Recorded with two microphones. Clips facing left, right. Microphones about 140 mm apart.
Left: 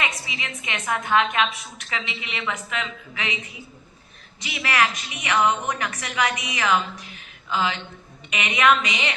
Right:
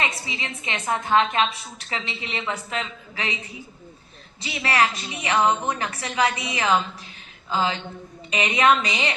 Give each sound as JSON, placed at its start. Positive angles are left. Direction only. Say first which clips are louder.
{"t": 0.2, "sound": "a woman's voice", "louder": "right 1 dB", "side_deg": -30}